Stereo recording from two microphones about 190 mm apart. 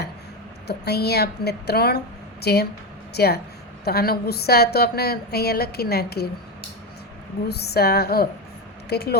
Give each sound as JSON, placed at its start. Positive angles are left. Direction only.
{"t": 0.7, "sound": "a woman's voice", "side_deg": 60}
{"t": 7.4, "sound": "a woman's voice", "side_deg": 60}